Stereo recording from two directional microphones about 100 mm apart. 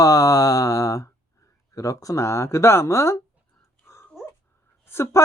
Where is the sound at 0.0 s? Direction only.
35° left (ahead or behind).